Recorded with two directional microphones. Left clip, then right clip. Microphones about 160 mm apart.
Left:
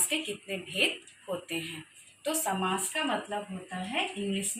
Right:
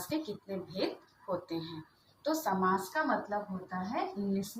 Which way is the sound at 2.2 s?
20° left (ahead or behind).